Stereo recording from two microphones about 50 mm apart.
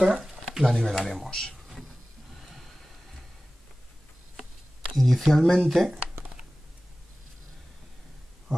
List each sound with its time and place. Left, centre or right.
0.0 s speech: centre
2.4 s a sound: centre
4.9 s speech: centre